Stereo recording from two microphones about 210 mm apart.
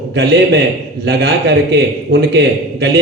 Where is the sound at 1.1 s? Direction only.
55° right (ahead or behind).